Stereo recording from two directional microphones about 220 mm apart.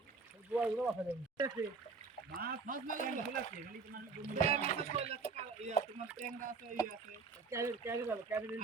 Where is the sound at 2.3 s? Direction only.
45° right (ahead or behind).